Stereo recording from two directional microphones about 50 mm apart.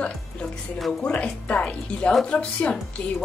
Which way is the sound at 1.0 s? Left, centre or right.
Left.